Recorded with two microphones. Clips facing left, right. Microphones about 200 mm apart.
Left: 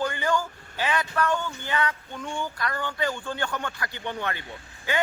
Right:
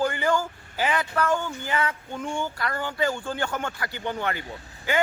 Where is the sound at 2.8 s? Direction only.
40° right (ahead or behind).